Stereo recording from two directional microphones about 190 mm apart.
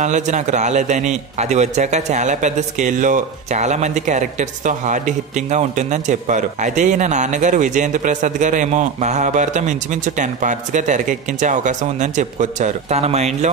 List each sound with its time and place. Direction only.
0.0 s a man's voice: 40° right (ahead or behind)